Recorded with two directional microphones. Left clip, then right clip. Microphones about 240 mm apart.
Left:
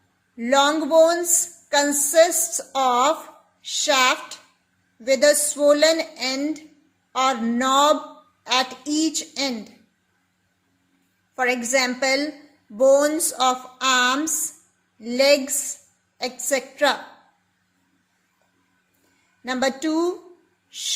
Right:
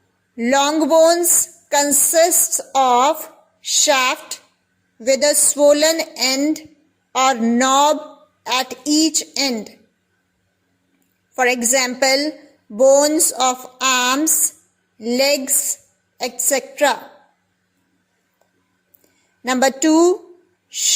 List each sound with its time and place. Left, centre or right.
0.3 s speech: right
3.9 s a woman's voice: centre
4.9 s speech: right
11.3 s a woman's voice: right
19.5 s speech: right